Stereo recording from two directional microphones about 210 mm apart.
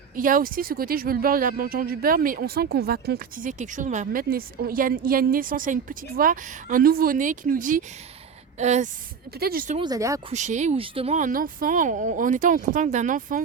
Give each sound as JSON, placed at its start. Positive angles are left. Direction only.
{"t": 0.2, "sound": "speech", "side_deg": -40}
{"t": 9.4, "sound": "speech", "side_deg": -45}
{"t": 9.7, "sound": "speech", "side_deg": -20}
{"t": 10.2, "sound": "speech", "side_deg": -35}